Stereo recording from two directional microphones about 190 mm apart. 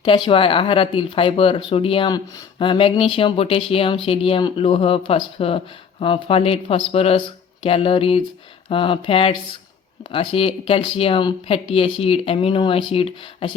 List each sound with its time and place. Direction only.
0.0 s speech: 25° left (ahead or behind)